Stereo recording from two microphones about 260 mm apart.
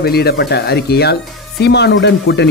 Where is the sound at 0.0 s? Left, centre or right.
Left.